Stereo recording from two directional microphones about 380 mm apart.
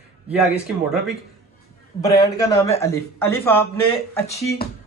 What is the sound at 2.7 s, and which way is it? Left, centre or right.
Speech, centre.